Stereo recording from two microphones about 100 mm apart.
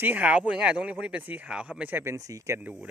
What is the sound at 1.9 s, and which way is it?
Speech, 25° right (ahead or behind).